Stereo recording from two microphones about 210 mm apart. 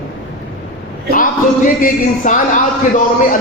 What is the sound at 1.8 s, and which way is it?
Speech, 35° left (ahead or behind).